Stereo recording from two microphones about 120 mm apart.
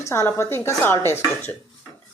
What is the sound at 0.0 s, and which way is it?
Speech, 25° left (ahead or behind).